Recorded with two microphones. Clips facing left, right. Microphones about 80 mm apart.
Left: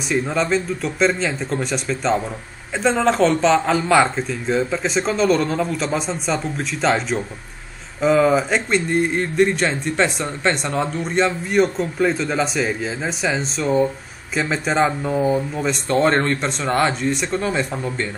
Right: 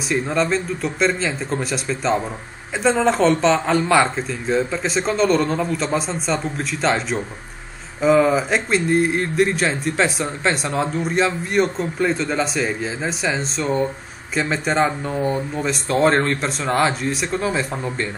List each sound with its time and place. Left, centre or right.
0.1 s speech: centre